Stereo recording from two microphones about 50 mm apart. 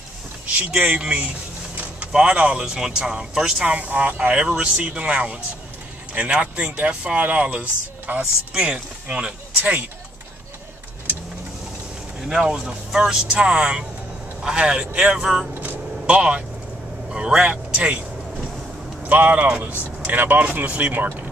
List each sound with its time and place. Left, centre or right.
0.7 s speech: right
3.6 s speech: right
4.4 s speech: right
8.2 s speech: centre
12.2 s speech: centre
15.1 s speech: centre
16.1 s speech: right
19.0 s speech: right